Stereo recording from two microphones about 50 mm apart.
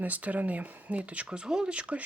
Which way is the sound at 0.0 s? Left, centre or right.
Right.